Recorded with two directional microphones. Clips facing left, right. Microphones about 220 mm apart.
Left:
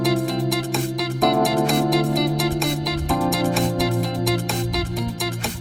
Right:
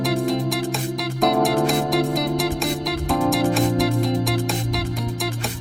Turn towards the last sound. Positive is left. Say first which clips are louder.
# even
turn(degrees=0)  # may be behind; listen again after turning